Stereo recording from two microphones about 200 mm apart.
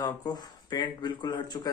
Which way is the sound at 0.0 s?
20° left (ahead or behind).